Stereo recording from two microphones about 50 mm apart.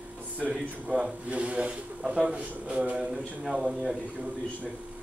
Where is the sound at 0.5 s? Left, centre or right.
Centre.